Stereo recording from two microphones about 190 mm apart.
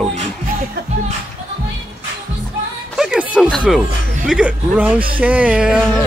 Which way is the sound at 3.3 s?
5° right (ahead or behind).